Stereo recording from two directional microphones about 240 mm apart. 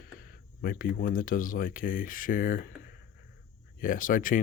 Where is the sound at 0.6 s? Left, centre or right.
Left.